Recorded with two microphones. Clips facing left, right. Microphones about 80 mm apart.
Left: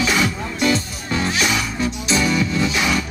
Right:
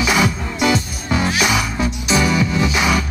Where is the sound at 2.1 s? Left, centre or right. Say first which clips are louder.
Right 3 dB; right.